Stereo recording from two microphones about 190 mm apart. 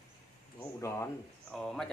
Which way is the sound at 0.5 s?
15° left (ahead or behind).